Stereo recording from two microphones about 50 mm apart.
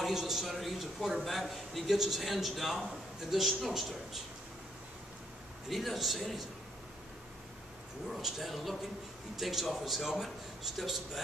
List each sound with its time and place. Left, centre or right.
0.0 s a man's voice: centre
5.7 s a man's voice: centre
8.1 s a man's voice: centre